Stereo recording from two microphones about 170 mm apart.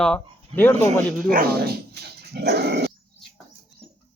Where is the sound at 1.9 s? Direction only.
70° right (ahead or behind).